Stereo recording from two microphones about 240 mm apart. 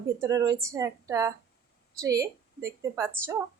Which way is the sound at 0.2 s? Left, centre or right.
Centre.